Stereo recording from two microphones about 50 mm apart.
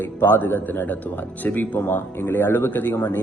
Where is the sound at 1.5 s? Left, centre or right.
Left.